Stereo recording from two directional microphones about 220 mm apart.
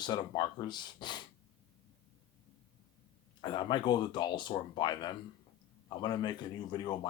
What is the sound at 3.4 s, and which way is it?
Speech, 20° left (ahead or behind).